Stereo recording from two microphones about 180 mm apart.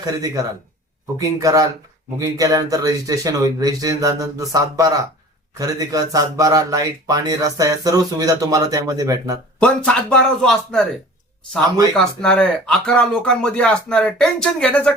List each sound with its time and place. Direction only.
0.0 s speech: 20° right (ahead or behind)
9.6 s speech: 5° left (ahead or behind)
11.9 s speech: 5° left (ahead or behind)